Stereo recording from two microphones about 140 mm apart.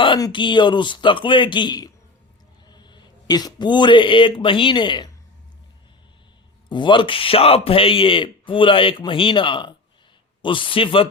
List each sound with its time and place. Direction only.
0.0 s speech: 35° left (ahead or behind)
6.7 s speech: 35° left (ahead or behind)